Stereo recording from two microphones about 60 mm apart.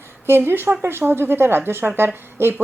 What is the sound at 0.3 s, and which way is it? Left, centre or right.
A woman's voice, right.